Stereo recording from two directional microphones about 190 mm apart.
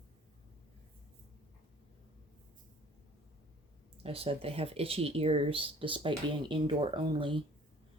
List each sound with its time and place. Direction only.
4.0 s speech: 30° right (ahead or behind)